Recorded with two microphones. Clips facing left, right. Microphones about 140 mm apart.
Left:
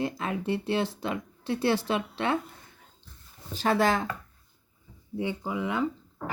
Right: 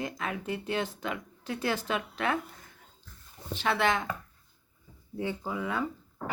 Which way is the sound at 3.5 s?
40° left (ahead or behind).